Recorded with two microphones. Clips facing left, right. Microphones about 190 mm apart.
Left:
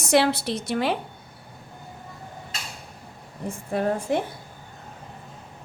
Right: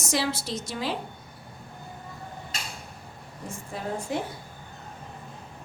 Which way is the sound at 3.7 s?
60° left (ahead or behind).